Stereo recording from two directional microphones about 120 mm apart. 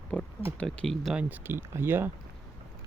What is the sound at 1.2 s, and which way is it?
Speech, 15° right (ahead or behind).